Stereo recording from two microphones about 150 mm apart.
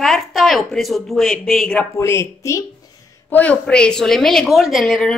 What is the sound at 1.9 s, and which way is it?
Speech, 20° left (ahead or behind).